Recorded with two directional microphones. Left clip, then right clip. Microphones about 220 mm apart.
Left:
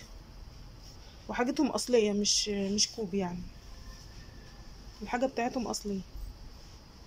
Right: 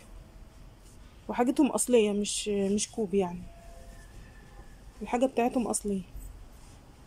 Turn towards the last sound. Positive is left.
turn(degrees=-15)  # may be behind; listen again after turning